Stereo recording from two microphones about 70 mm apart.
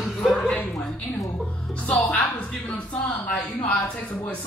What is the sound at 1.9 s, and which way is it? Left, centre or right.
Speech, left.